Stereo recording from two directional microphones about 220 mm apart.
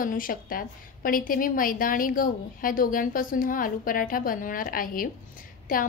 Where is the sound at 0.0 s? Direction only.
40° left (ahead or behind).